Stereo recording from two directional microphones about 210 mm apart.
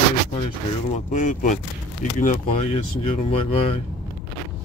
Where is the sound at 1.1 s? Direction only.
35° left (ahead or behind).